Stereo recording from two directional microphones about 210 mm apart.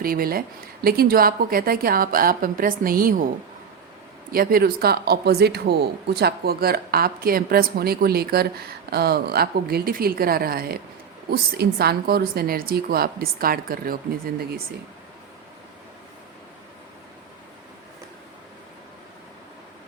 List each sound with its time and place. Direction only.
0.0 s speech: 45° right (ahead or behind)
4.3 s speech: 45° right (ahead or behind)